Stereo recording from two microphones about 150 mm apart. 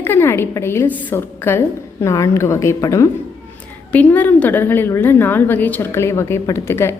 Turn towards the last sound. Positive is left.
turn(degrees=15)  # may be behind; listen again after turning